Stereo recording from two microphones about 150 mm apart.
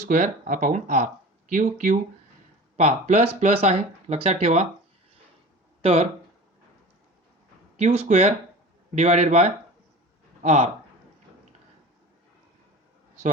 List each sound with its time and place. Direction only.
0.0 s speech: 60° right (ahead or behind)
2.7 s speech: 50° right (ahead or behind)
5.8 s speech: 45° right (ahead or behind)
7.8 s speech: 45° right (ahead or behind)